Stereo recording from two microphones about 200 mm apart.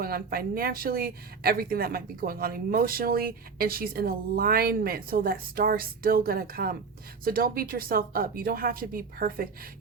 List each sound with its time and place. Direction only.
0.0 s speech: 50° right (ahead or behind)